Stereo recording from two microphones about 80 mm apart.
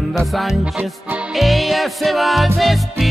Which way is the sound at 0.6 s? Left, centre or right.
Centre.